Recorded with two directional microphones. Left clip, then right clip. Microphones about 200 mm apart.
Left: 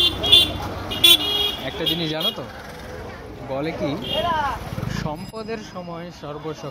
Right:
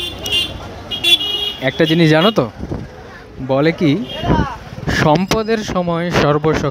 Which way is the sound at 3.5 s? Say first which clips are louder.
Right 11 dB; 45° right (ahead or behind).